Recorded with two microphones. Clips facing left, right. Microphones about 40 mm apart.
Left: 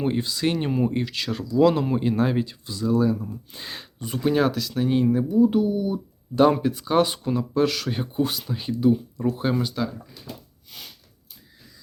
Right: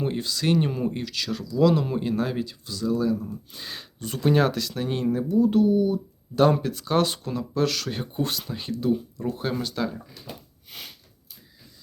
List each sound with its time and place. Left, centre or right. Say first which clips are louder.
0.0 s speech: left 3 dB; centre